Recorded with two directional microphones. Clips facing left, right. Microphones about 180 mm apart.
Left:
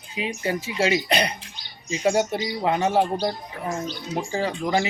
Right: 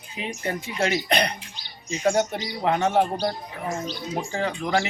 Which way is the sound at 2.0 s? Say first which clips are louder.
Left 1 dB; 5° left (ahead or behind).